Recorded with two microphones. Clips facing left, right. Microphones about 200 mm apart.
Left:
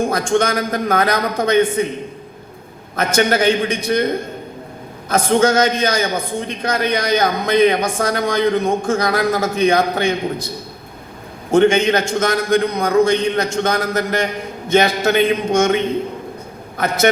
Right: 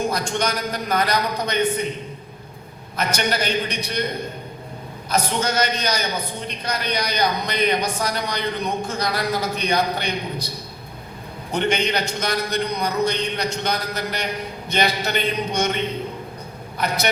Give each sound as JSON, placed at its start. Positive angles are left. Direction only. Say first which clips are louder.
{"t": 0.0, "sound": "a man's voice", "louder": "left 6 dB", "side_deg": 50}
{"t": 2.9, "sound": "a man's voice", "louder": "left 7 dB", "side_deg": 50}
{"t": 11.5, "sound": "a man's voice", "louder": "left 9 dB", "side_deg": 50}
{"t": 16.7, "sound": "a man's voice", "louder": "left 7 dB", "side_deg": 50}